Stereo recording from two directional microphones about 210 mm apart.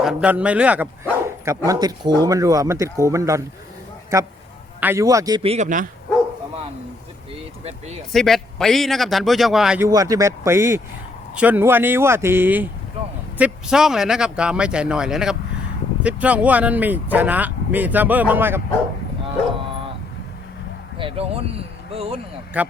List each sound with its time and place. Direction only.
0.0 s a man's voice: 5° right (ahead or behind); by 5.9 s 35° right (ahead or behind)
7.6 s speech: 30° right (ahead or behind)
8.1 s a man's voice: centre (ahead or behind)
21.0 s speech: 30° right (ahead or behind)
22.5 s speech: 5° right (ahead or behind)